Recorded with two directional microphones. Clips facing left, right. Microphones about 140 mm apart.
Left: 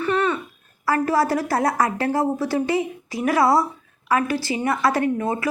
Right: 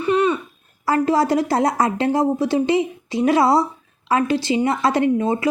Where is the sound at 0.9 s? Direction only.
20° right (ahead or behind).